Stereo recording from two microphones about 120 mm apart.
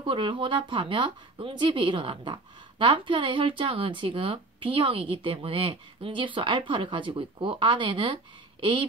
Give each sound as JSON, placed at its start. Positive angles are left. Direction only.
{"t": 0.0, "sound": "a woman's voice", "side_deg": -45}